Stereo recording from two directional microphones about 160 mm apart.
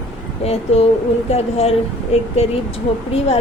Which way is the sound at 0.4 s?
40° left (ahead or behind).